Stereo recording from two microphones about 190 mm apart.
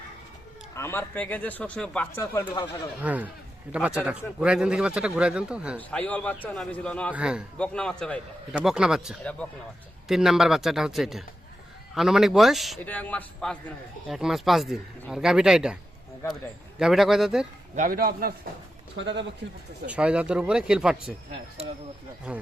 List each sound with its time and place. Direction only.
0.8 s a man's voice: 10° left (ahead or behind)
3.0 s speech: 10° right (ahead or behind)
5.7 s a man's voice: 10° left (ahead or behind)
7.1 s speech: 5° right (ahead or behind)
17.7 s speech: 45° right (ahead or behind)
18.9 s speech: 70° right (ahead or behind)
19.9 s speech: 5° right (ahead or behind)
22.3 s speech: 5° right (ahead or behind)